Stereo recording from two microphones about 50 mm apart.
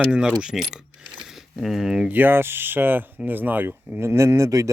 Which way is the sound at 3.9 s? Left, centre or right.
Right.